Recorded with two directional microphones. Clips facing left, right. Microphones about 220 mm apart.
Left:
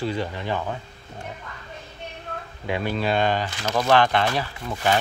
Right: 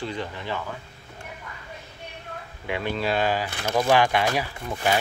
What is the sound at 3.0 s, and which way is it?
Speech, 5° right (ahead or behind).